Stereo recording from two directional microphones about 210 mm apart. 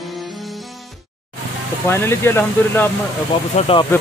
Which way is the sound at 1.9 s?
10° left (ahead or behind).